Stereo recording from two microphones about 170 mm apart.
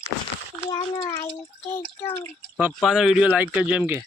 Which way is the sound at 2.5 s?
5° right (ahead or behind).